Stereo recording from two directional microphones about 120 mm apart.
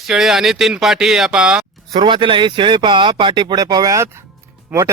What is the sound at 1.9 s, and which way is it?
A man's voice, 40° right (ahead or behind).